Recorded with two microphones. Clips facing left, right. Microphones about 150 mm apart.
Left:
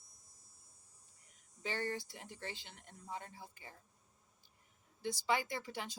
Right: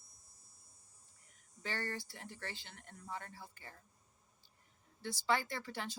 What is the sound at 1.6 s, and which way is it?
Speech, 20° left (ahead or behind).